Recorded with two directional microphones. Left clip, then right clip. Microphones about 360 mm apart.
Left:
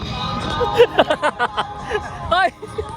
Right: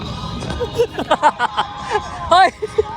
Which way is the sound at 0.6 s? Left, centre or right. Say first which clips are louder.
Left 6 dB; centre.